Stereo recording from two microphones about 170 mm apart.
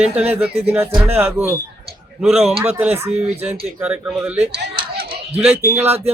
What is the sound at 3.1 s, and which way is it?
Speech, 40° right (ahead or behind).